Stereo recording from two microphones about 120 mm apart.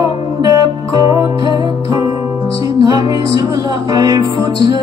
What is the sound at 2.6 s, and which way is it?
Music, 30° right (ahead or behind).